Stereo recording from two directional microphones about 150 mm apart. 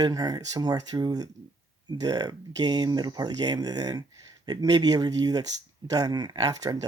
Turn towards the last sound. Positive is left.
turn(degrees=-25)  # may be behind; listen again after turning